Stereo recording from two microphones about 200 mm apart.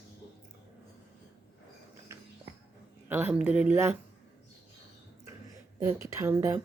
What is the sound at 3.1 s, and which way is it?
Speech, 10° right (ahead or behind).